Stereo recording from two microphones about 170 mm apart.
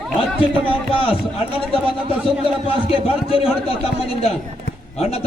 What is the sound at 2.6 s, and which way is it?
Speech, 35° left (ahead or behind).